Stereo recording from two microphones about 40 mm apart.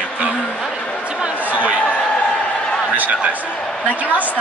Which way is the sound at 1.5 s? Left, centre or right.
Right.